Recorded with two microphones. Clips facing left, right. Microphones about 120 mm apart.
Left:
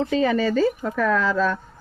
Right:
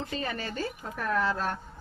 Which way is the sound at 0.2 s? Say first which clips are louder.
Left 16 dB; 90° left.